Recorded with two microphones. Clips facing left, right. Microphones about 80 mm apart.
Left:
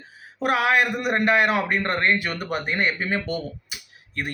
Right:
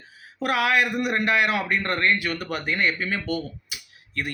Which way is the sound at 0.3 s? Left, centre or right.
Left.